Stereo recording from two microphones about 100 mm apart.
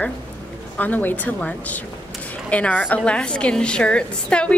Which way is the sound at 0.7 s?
15° left (ahead or behind).